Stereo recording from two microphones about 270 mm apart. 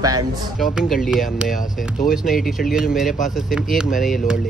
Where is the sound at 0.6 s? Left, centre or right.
Centre.